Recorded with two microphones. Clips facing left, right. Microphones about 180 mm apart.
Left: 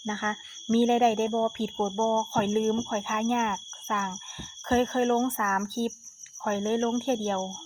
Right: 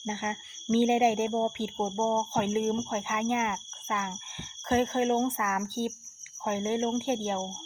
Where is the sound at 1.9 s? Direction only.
50° left (ahead or behind).